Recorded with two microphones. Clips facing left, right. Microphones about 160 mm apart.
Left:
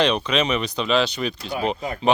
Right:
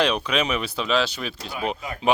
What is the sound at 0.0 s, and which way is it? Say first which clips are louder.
A man's voice: left 2 dB; 5° right (ahead or behind).